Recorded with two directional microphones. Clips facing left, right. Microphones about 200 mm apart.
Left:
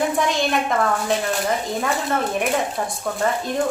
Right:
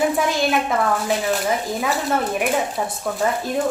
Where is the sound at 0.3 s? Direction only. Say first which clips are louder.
Right 1 dB; 5° right (ahead or behind).